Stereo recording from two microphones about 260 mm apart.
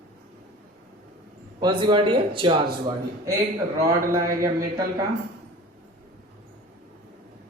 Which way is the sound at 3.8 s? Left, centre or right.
Centre.